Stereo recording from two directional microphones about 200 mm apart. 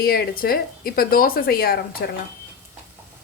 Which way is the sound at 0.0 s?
50° left (ahead or behind).